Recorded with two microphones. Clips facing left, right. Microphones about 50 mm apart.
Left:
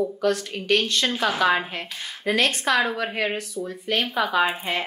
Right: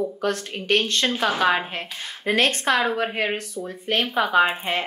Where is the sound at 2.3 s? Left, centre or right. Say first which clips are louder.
Right 1 dB; right.